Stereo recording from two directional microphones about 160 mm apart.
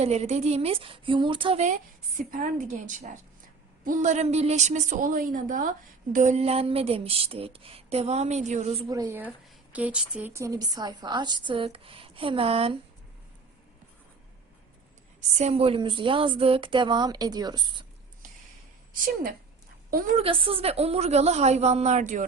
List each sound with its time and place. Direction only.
0.0 s speech: 40° right (ahead or behind)
2.1 s a woman's voice: 55° right (ahead or behind)
6.1 s speech: 45° right (ahead or behind)
8.9 s a woman's voice: 20° right (ahead or behind); by 12.7 s 35° right (ahead or behind)
15.4 s a woman's voice: 40° right (ahead or behind)
20.1 s speech: 35° right (ahead or behind); by 22.3 s 55° right (ahead or behind)